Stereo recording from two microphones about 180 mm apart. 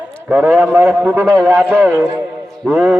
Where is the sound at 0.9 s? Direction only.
10° right (ahead or behind).